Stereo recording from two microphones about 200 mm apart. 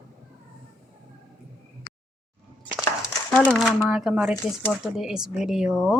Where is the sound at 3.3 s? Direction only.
5° left (ahead or behind).